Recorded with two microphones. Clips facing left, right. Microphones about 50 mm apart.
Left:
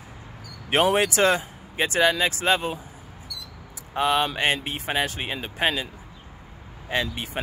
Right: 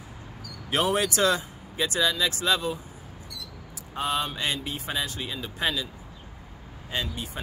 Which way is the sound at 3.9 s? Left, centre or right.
Left.